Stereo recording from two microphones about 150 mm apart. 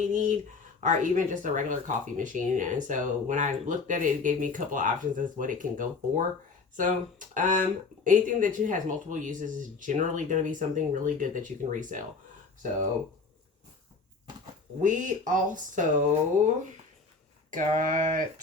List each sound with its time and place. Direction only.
0.1 s speech: 60° right (ahead or behind)
14.8 s speech: 60° right (ahead or behind)
17.5 s speech: 60° right (ahead or behind)